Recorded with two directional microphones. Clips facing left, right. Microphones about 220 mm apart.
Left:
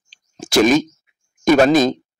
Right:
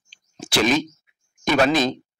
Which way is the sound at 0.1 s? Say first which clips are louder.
Left 7 dB; 40° left (ahead or behind).